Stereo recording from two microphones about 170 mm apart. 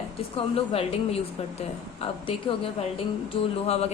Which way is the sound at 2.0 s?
30° left (ahead or behind).